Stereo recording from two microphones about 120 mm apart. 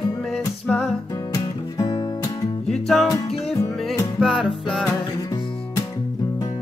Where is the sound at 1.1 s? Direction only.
30° left (ahead or behind).